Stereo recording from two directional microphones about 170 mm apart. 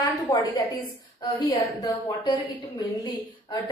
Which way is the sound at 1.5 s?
25° left (ahead or behind).